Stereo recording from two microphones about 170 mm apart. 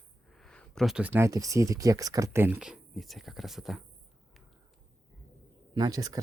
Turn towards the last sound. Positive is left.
turn(degrees=-20)  # may be behind; listen again after turning